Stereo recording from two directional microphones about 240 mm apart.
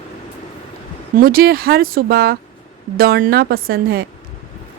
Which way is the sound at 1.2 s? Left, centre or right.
Right.